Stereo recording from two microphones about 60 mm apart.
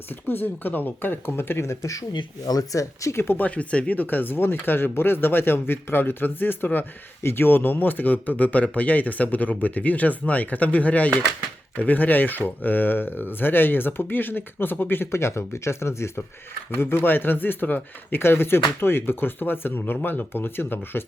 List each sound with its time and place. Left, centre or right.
0.3 s speech: left
1.7 s speech: left
2.5 s speech: left
3.2 s speech: left
16.7 s speech: left